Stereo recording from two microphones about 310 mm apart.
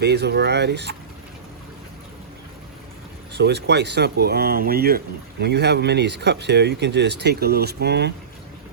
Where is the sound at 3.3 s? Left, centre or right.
Right.